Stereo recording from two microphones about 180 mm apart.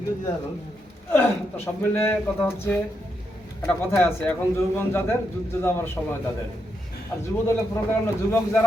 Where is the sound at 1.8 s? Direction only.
10° left (ahead or behind).